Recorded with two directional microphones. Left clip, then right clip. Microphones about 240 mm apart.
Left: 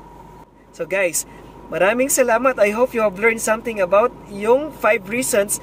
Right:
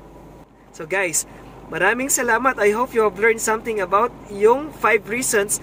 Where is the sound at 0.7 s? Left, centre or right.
Centre.